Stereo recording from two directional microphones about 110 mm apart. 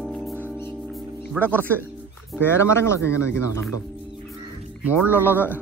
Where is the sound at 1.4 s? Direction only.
15° left (ahead or behind).